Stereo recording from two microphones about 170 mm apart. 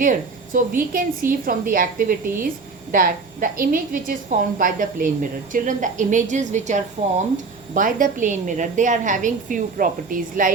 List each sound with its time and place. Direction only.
0.0 s a woman's voice: 50° right (ahead or behind)